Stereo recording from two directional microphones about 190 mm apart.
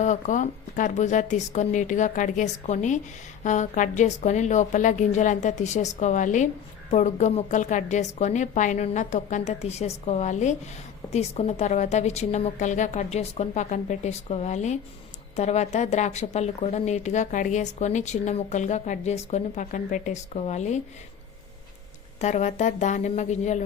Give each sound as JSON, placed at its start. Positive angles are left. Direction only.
{"t": 0.0, "sound": "speech", "side_deg": 40}
{"t": 22.2, "sound": "speech", "side_deg": 35}